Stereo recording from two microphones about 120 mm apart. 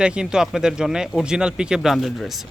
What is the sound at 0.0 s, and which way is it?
Speech, 5° right (ahead or behind).